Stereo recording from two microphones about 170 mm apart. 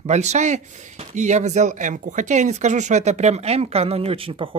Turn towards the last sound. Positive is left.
turn(degrees=-30)  # may be behind; listen again after turning